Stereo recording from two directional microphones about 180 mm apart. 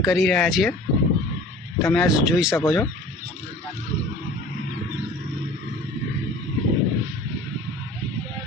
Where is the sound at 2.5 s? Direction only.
15° left (ahead or behind).